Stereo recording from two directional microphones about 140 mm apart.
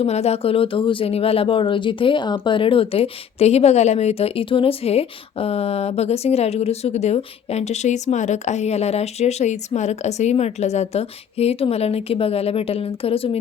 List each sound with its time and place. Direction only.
0.0 s speech: 50° left (ahead or behind)